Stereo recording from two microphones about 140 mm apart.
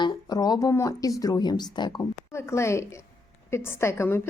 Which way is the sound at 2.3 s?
20° left (ahead or behind).